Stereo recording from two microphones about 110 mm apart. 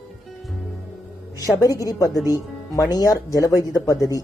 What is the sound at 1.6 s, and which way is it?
Speech, 35° left (ahead or behind).